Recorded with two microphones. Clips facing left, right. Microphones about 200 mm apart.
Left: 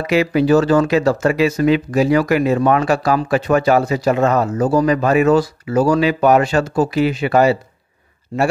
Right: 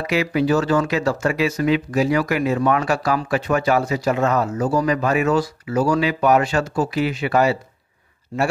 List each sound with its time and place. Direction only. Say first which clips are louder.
0.0 s speech: left 4 dB; 30° left (ahead or behind)